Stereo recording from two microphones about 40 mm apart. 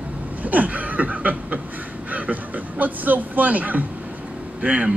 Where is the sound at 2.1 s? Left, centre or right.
Right.